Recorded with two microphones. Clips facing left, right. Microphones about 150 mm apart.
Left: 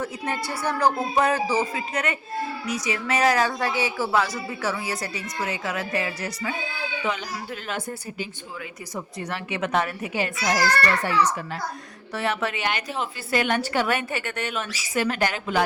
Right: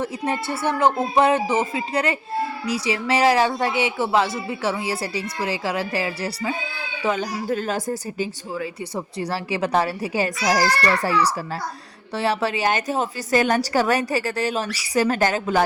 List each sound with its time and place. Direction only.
0.0 s speech: 25° right (ahead or behind)
7.0 s a woman's voice: 45° right (ahead or behind)